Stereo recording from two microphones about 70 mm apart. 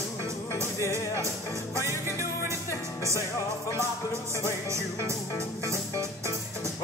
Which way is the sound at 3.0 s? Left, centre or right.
Right.